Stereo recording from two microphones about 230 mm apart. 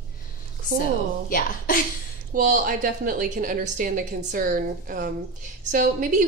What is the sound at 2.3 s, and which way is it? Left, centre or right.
A woman's voice, right.